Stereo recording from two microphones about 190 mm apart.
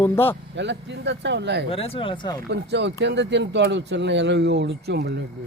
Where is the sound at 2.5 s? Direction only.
65° right (ahead or behind).